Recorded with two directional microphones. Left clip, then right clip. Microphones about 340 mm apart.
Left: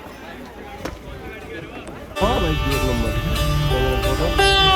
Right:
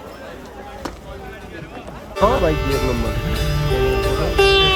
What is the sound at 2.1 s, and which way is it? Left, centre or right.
Music, centre.